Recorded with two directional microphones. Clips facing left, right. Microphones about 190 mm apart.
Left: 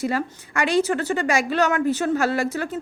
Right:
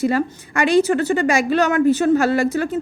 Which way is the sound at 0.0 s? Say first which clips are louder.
Right 6 dB; 20° right (ahead or behind).